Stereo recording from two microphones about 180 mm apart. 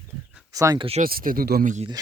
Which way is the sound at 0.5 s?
20° right (ahead or behind).